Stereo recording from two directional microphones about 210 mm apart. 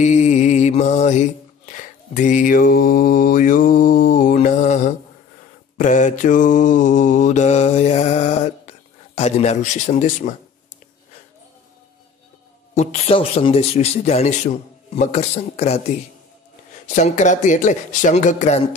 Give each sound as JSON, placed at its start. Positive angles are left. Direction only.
{"t": 0.0, "sound": "mantra", "side_deg": 35}
{"t": 12.7, "sound": "speech", "side_deg": 30}
{"t": 16.8, "sound": "speech", "side_deg": 35}